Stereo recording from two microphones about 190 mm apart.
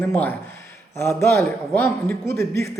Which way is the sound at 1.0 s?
15° left (ahead or behind).